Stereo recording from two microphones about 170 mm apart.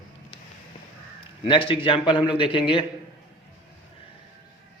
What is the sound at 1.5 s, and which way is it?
A man's voice, 30° left (ahead or behind).